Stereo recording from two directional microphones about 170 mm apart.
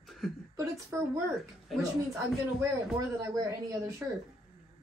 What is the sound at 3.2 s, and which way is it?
Speech, 20° right (ahead or behind).